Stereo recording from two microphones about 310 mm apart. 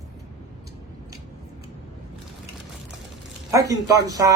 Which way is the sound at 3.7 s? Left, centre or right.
Centre.